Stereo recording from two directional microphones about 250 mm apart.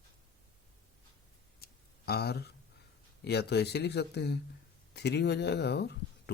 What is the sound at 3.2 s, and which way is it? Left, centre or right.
Speech, left.